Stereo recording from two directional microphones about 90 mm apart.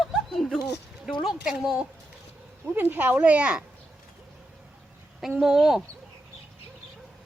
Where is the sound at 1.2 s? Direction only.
5° right (ahead or behind).